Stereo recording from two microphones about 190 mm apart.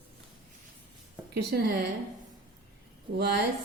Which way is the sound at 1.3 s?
55° right (ahead or behind).